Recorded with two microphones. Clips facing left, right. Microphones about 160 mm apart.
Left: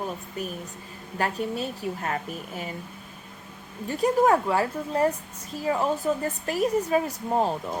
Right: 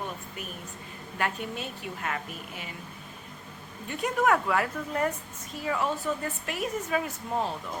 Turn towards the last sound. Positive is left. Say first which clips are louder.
# left 6 dB
turn(degrees=40)  # may be behind; listen again after turning